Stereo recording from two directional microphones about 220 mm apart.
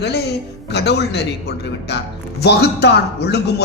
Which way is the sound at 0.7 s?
50° left (ahead or behind).